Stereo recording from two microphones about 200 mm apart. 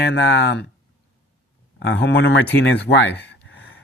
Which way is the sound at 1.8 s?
60° left (ahead or behind).